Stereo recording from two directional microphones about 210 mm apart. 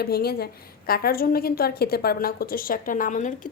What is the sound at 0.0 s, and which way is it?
A woman's voice, 50° left (ahead or behind).